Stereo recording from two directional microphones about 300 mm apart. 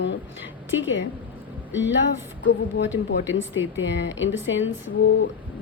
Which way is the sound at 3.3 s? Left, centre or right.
Left.